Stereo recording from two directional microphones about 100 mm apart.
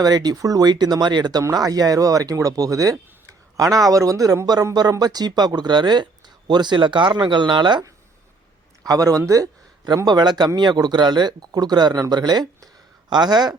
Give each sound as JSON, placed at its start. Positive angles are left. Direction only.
{"t": 0.0, "sound": "speech", "side_deg": -40}
{"t": 8.9, "sound": "a man's voice", "side_deg": -35}